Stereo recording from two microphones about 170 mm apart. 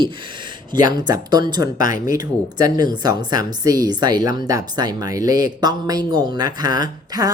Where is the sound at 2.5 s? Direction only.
25° right (ahead or behind).